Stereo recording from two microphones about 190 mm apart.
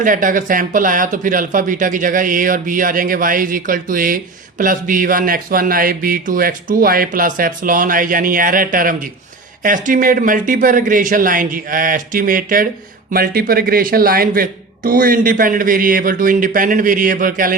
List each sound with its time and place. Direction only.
0.0 s speech: 45° right (ahead or behind)